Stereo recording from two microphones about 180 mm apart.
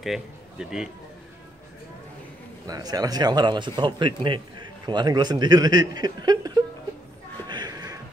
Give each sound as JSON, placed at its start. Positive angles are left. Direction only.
{"t": 0.0, "sound": "speech", "side_deg": 0}
{"t": 2.6, "sound": "speech", "side_deg": -20}
{"t": 7.4, "sound": "a sound", "side_deg": -25}